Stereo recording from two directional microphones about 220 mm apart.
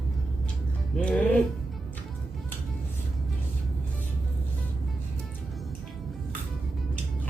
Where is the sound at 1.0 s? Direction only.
5° left (ahead or behind).